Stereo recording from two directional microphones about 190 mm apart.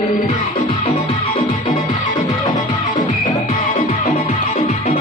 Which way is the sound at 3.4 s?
45° left (ahead or behind).